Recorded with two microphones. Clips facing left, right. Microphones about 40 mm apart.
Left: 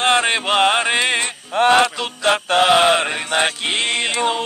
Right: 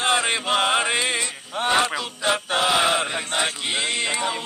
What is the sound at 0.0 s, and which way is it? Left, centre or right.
Chant, left.